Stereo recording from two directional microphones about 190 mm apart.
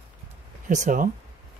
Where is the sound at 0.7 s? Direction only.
40° right (ahead or behind).